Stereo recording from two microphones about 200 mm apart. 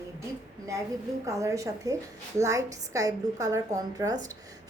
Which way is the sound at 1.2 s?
15° right (ahead or behind).